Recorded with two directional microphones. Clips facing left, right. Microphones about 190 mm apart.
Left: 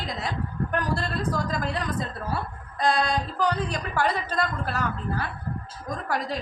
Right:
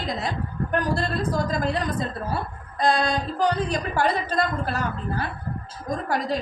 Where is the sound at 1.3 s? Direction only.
25° right (ahead or behind).